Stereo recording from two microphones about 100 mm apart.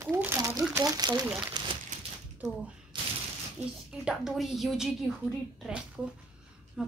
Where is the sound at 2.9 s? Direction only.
55° right (ahead or behind).